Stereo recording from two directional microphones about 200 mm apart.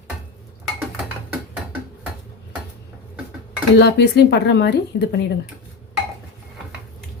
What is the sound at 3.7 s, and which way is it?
Speech, 55° left (ahead or behind).